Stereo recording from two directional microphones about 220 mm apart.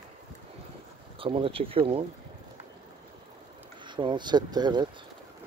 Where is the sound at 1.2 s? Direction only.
25° right (ahead or behind).